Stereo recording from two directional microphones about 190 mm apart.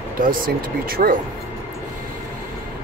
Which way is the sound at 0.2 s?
50° right (ahead or behind).